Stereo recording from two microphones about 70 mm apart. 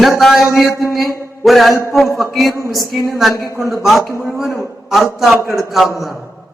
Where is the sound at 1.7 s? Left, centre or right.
Left.